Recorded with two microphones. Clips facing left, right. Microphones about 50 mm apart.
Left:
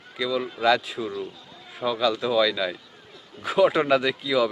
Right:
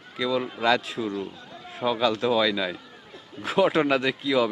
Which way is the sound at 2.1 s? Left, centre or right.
Centre.